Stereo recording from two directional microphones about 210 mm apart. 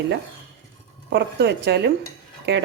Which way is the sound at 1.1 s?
55° right (ahead or behind).